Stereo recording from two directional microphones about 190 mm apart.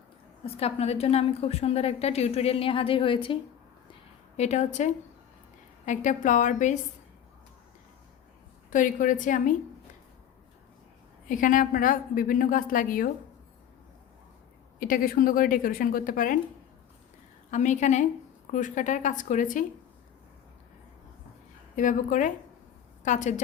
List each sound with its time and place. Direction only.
0.4 s a woman's voice: 30° left (ahead or behind)
4.4 s a woman's voice: 35° left (ahead or behind)
8.7 s a woman's voice: 45° left (ahead or behind)
11.3 s a woman's voice: 45° left (ahead or behind)
14.8 s a woman's voice: 50° left (ahead or behind)
17.5 s a woman's voice: 40° left (ahead or behind)
21.8 s a woman's voice: 45° left (ahead or behind)